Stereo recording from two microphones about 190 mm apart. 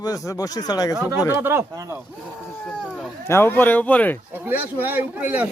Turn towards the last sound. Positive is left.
turn(degrees=-10)  # may be behind; listen again after turning